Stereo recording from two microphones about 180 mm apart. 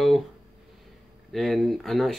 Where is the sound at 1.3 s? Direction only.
Centre (ahead or behind).